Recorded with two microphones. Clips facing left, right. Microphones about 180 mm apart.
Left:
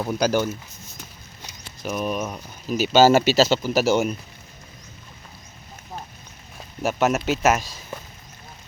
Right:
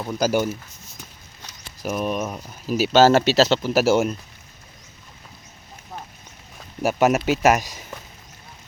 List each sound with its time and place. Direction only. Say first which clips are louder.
0.2 s speech: right 2 dB; 10° right (ahead or behind)
1.8 s speech: right 1 dB; centre (ahead or behind)
6.8 s speech: right 3 dB; 10° right (ahead or behind)